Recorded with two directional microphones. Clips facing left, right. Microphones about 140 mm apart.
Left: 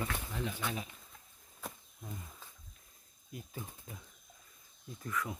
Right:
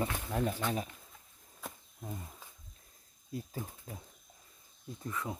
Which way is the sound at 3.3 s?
30° right (ahead or behind).